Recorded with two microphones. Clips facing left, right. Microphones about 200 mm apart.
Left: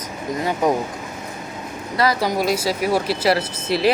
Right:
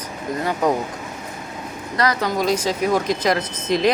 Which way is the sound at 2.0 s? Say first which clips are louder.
Left 1 dB; 10° left (ahead or behind).